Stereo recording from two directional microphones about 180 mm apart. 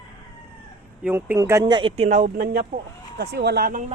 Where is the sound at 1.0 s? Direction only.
10° right (ahead or behind); by 2.8 s 50° right (ahead or behind).